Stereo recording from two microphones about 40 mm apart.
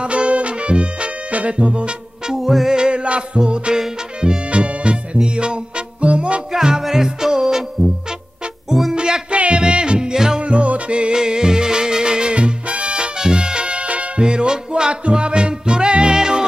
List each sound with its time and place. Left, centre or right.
0.0 s music: right
2.4 s music: centre
2.7 s music: right
6.5 s music: centre
8.9 s music: right
10.4 s music: right